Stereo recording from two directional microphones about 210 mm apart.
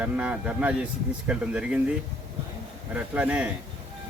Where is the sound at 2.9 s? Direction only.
5° right (ahead or behind).